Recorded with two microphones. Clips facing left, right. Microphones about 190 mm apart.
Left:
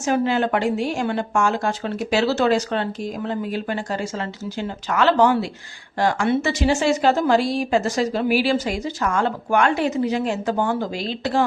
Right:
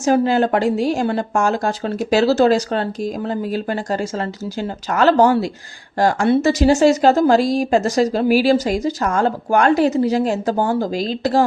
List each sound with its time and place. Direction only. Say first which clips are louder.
0.0 s a woman's voice: right 5 dB; 35° right (ahead or behind)